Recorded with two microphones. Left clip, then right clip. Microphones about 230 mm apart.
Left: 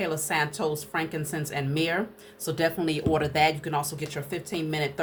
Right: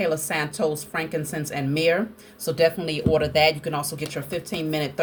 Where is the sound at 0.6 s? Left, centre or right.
Centre.